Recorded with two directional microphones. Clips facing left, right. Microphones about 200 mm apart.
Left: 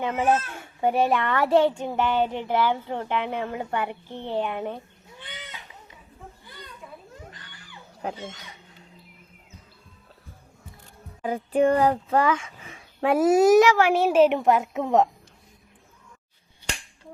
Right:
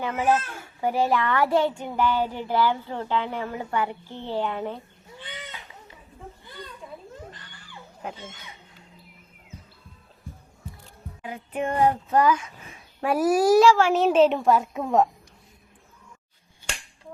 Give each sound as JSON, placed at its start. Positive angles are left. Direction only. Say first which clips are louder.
{"t": 0.0, "sound": "speech", "louder": "left 1 dB", "side_deg": 20}
{"t": 11.2, "sound": "a sound", "louder": "left 8 dB", "side_deg": 35}
{"t": 13.0, "sound": "speech", "louder": "left 3 dB", "side_deg": 25}